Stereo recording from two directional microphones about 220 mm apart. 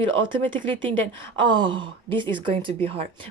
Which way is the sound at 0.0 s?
25° right (ahead or behind).